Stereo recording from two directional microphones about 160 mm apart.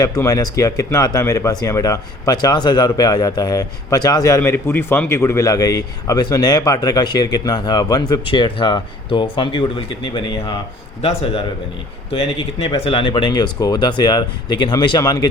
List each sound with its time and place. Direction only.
0.0 s speech: 20° left (ahead or behind)
12.1 s speech: 35° left (ahead or behind)